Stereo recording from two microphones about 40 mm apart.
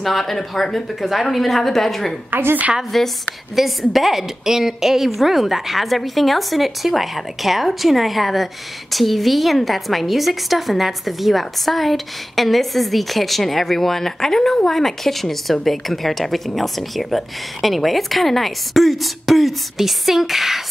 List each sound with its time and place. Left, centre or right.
0.0 s a woman's voice: centre
2.3 s a woman's voice: right
2.9 s a woman's voice: centre